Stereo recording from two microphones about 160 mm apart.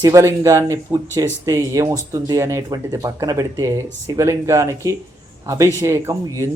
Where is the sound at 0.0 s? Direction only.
20° right (ahead or behind).